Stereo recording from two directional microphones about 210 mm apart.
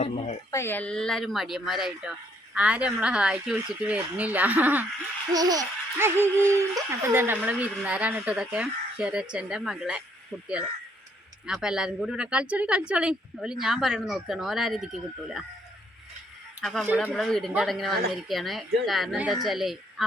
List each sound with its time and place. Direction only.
0.5 s speech: 10° left (ahead or behind)
11.4 s speech: 5° right (ahead or behind)
16.6 s speech: 5° right (ahead or behind)